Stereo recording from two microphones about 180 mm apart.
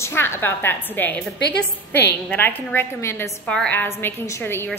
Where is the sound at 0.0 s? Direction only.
15° left (ahead or behind).